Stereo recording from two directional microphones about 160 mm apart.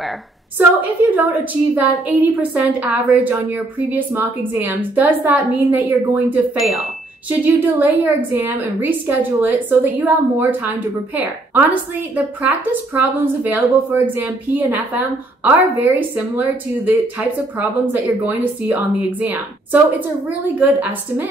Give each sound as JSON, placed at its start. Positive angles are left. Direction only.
{"t": 0.6, "sound": "a woman's voice", "side_deg": -10}
{"t": 6.5, "sound": "speech", "side_deg": 0}
{"t": 7.2, "sound": "a woman's voice", "side_deg": -10}
{"t": 12.2, "sound": "a woman's voice", "side_deg": -10}